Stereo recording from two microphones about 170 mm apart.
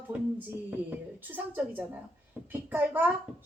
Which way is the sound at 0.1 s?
5° right (ahead or behind).